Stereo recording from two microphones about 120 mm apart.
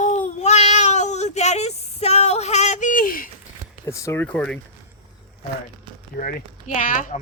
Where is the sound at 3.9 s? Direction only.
25° left (ahead or behind).